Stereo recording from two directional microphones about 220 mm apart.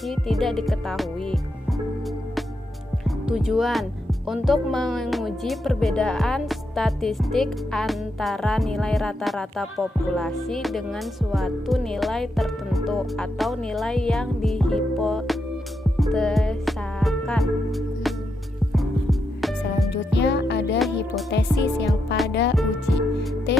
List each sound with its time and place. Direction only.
0.0 s speech: centre (ahead or behind)
3.2 s speech: 5° right (ahead or behind)
16.0 s music: centre (ahead or behind)
19.4 s music: centre (ahead or behind)
19.9 s speech: 50° left (ahead or behind)
21.2 s music: 50° left (ahead or behind)